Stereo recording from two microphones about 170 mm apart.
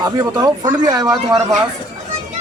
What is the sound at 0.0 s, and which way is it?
A man's voice, 25° right (ahead or behind).